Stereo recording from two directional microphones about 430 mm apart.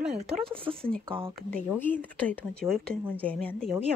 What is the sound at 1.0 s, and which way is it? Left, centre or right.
Speech, centre.